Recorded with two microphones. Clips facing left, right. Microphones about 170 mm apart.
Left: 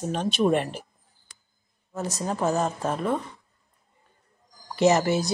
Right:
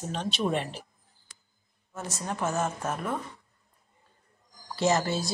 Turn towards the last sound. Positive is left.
turn(degrees=20)  # may be behind; listen again after turning